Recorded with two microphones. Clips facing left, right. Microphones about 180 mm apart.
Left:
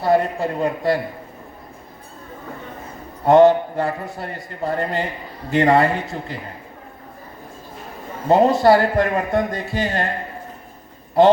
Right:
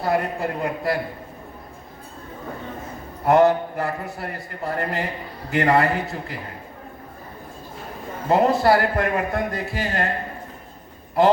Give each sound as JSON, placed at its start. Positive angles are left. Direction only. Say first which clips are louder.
{"t": 0.0, "sound": "a man's voice", "louder": "left 5 dB", "side_deg": 30}
{"t": 3.2, "sound": "a man's voice", "louder": "left 4 dB", "side_deg": 25}
{"t": 8.3, "sound": "a man's voice", "louder": "left 4 dB", "side_deg": 30}